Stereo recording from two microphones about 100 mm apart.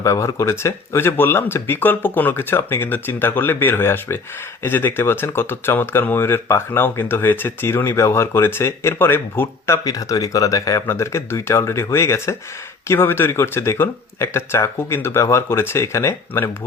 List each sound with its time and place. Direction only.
0.0 s speech: 30° left (ahead or behind)